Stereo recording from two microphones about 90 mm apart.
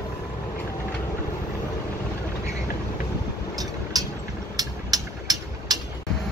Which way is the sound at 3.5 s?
45° right (ahead or behind).